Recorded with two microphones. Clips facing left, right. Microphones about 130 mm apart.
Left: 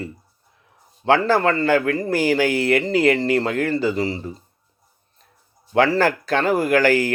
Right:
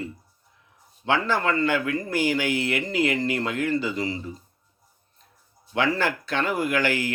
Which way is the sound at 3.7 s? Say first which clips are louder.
Left 5 dB; 35° left (ahead or behind).